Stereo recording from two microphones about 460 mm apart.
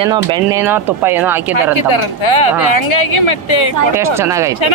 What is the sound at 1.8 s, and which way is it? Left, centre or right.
A woman's voice, left.